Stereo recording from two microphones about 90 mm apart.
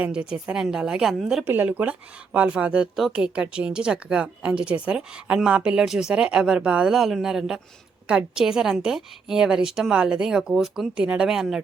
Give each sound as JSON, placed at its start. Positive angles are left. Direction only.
{"t": 0.0, "sound": "speech", "side_deg": -10}
{"t": 1.5, "sound": "speech", "side_deg": -20}